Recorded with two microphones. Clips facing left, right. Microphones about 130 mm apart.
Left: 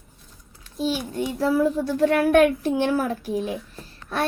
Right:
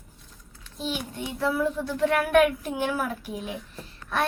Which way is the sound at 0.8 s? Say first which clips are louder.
Left 7 dB; 40° left (ahead or behind).